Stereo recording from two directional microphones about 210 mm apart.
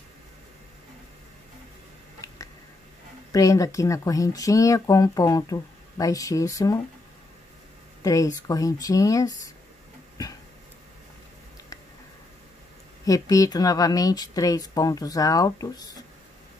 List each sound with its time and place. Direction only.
3.3 s speech: 15° left (ahead or behind)
8.0 s speech: 15° left (ahead or behind)
13.0 s speech: 15° left (ahead or behind)